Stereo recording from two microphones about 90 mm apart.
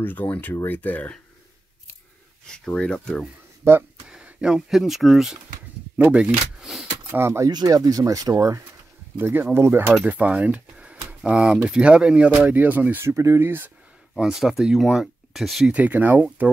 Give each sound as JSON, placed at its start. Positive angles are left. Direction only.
{"t": 0.0, "sound": "speech", "side_deg": 20}
{"t": 2.4, "sound": "speech", "side_deg": 5}
{"t": 3.6, "sound": "speech", "side_deg": -30}
{"t": 4.0, "sound": "speech", "side_deg": -10}
{"t": 5.9, "sound": "speech", "side_deg": -15}
{"t": 6.6, "sound": "speech", "side_deg": -5}
{"t": 6.9, "sound": "a sound", "side_deg": -25}
{"t": 7.4, "sound": "speech", "side_deg": -45}
{"t": 9.2, "sound": "speech", "side_deg": -25}
{"t": 14.1, "sound": "speech", "side_deg": -5}
{"t": 15.7, "sound": "speech", "side_deg": -20}